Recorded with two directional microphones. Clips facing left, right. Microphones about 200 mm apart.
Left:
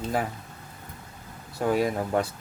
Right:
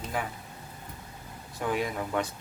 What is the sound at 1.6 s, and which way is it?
Speech, 40° left (ahead or behind).